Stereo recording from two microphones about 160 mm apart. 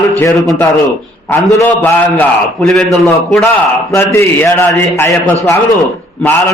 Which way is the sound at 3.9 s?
15° left (ahead or behind).